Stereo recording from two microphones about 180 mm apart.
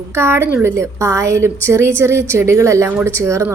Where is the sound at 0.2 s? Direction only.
15° right (ahead or behind).